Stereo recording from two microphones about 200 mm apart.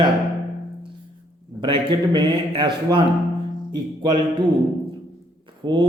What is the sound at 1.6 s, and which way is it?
Mantra, 25° right (ahead or behind).